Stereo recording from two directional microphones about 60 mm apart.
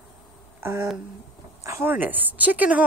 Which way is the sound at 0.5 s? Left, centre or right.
Right.